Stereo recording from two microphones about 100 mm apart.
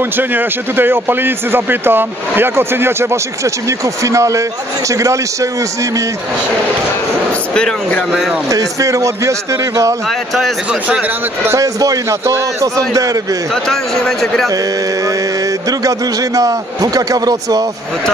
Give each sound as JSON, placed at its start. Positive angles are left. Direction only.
{"t": 0.2, "sound": "a man's voice", "side_deg": -20}
{"t": 7.5, "sound": "speech", "side_deg": 10}
{"t": 8.5, "sound": "a man's voice", "side_deg": -35}
{"t": 10.0, "sound": "speech", "side_deg": 0}
{"t": 10.7, "sound": "a man's voice", "side_deg": -15}
{"t": 11.4, "sound": "a man's voice", "side_deg": -35}
{"t": 13.7, "sound": "speech", "side_deg": 5}
{"t": 15.8, "sound": "a man's voice", "side_deg": -35}